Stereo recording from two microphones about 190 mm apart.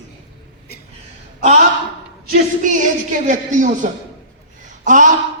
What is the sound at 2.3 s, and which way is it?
Speech, 40° right (ahead or behind).